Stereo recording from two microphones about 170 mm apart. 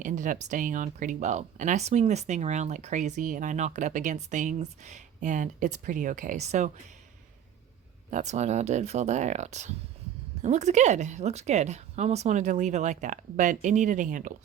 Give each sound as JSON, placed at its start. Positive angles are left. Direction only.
{"t": 0.0, "sound": "speech", "side_deg": -50}
{"t": 8.1, "sound": "speech", "side_deg": -45}